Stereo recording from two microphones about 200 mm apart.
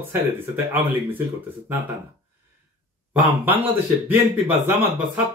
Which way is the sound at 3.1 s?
10° right (ahead or behind).